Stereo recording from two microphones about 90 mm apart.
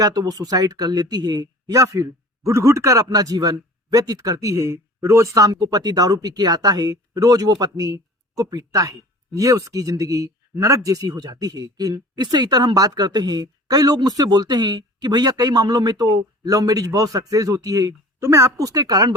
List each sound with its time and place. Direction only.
0.0 s speech: 45° right (ahead or behind)